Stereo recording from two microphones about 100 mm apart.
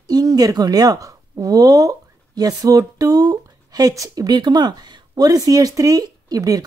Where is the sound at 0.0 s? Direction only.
40° right (ahead or behind).